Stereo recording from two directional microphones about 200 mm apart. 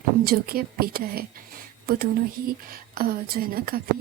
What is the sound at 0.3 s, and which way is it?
Speech, 50° right (ahead or behind).